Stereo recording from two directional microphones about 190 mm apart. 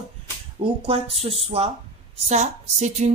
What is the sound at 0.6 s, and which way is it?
Speech, 30° right (ahead or behind).